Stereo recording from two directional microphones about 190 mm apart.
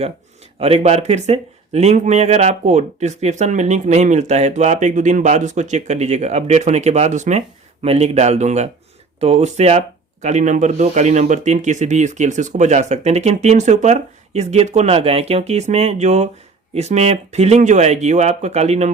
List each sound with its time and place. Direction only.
0.6 s speech: 35° right (ahead or behind)